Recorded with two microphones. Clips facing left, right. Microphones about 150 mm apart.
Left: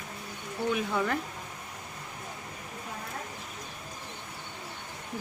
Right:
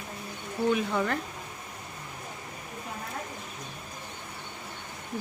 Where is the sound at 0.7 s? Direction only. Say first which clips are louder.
Right 1 dB; centre (ahead or behind).